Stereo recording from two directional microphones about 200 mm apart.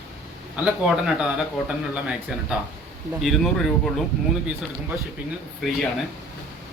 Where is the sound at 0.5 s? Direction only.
5° right (ahead or behind).